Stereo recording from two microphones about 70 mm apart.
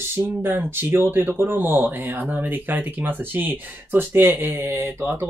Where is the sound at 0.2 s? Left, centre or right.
Right.